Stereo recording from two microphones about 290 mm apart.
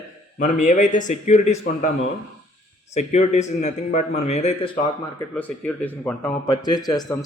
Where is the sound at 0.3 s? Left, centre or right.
Left.